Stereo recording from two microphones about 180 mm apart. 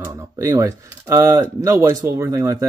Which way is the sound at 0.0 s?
15° right (ahead or behind).